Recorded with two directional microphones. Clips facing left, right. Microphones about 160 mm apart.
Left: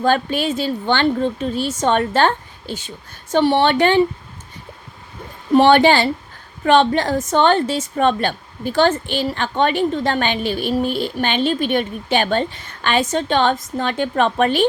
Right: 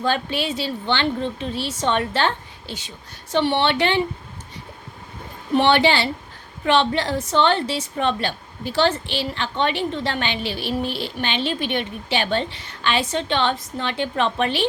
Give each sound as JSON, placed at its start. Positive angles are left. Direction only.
{"t": 0.0, "sound": "a woman's voice", "side_deg": 50}
{"t": 5.5, "sound": "a woman's voice", "side_deg": 45}